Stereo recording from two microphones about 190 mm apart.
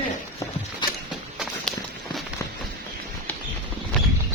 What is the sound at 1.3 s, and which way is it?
Walk, centre (ahead or behind).